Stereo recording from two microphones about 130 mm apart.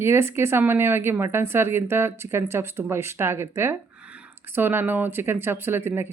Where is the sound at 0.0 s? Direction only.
20° right (ahead or behind).